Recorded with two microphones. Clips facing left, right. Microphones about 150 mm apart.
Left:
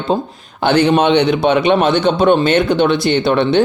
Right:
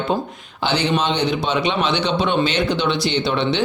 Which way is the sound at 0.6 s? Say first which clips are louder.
Left 8 dB; 55° left (ahead or behind).